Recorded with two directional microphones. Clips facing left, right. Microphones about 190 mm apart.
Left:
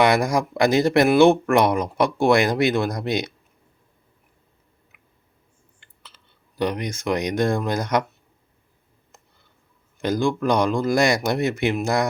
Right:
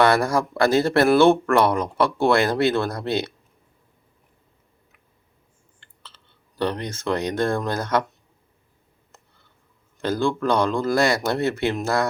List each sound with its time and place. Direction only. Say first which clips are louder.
0.0 s speech: even; 15° left (ahead or behind)
5.8 s a sound: right 2 dB; 10° left (ahead or behind)
6.6 s speech: left 1 dB; 15° left (ahead or behind)
10.0 s speech: left 1 dB; 15° left (ahead or behind)